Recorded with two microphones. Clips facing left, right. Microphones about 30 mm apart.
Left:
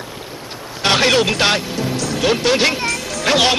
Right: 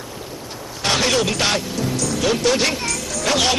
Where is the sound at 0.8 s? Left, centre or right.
Left.